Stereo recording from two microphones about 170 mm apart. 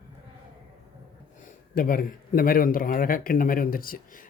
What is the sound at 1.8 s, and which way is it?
Speech, 55° left (ahead or behind).